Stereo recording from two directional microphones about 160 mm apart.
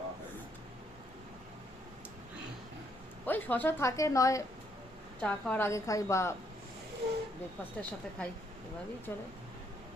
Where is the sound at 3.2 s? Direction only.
10° left (ahead or behind).